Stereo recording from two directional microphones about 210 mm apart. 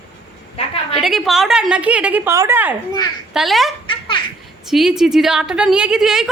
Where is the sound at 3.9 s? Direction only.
25° left (ahead or behind).